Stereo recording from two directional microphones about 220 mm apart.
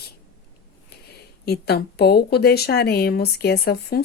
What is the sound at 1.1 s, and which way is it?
Speech, 45° left (ahead or behind).